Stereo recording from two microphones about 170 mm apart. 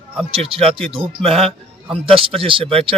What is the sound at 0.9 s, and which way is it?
Speech, 30° right (ahead or behind).